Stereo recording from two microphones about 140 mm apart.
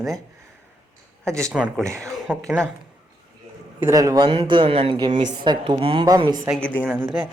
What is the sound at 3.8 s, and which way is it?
A man's voice, 25° right (ahead or behind).